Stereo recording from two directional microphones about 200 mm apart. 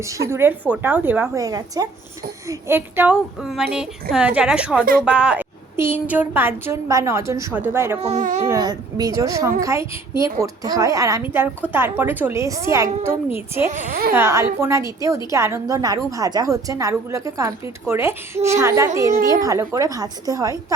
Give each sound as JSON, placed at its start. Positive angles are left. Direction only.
{"t": 0.1, "sound": "a woman's voice", "side_deg": -15}
{"t": 8.0, "sound": "a woman's voice", "side_deg": -35}
{"t": 8.4, "sound": "a woman's voice", "side_deg": -15}
{"t": 13.7, "sound": "a woman's voice", "side_deg": -40}
{"t": 14.2, "sound": "a woman's voice", "side_deg": -15}